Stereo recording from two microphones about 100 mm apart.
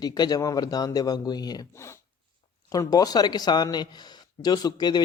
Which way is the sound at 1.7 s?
25° left (ahead or behind).